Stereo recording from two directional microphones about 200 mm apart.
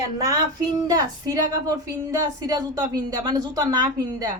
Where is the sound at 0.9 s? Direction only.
20° right (ahead or behind).